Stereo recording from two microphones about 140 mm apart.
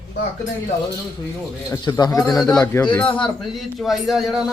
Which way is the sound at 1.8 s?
30° left (ahead or behind).